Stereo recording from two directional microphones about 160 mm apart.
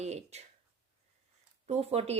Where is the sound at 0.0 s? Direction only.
45° right (ahead or behind).